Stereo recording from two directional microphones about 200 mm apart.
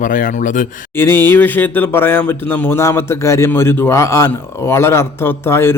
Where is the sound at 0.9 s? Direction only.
10° left (ahead or behind).